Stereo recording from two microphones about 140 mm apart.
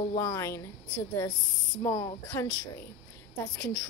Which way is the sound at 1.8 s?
20° left (ahead or behind).